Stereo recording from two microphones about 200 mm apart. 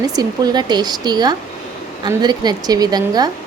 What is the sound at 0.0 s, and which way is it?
Speech, 20° right (ahead or behind).